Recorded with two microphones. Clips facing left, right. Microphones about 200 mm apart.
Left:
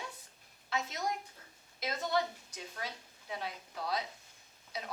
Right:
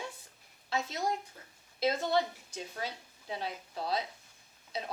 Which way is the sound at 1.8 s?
30° right (ahead or behind).